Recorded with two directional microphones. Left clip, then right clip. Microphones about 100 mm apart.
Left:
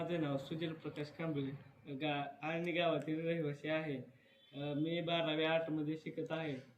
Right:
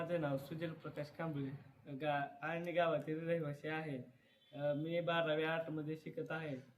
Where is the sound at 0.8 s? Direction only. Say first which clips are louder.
Left 1 dB; 50° right (ahead or behind).